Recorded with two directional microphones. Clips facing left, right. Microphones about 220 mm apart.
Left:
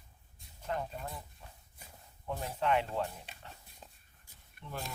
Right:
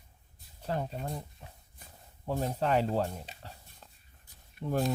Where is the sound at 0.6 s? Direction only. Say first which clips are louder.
Right 4 dB; 35° right (ahead or behind).